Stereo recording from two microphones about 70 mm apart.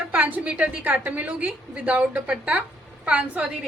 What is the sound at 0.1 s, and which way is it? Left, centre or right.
A woman's voice, right.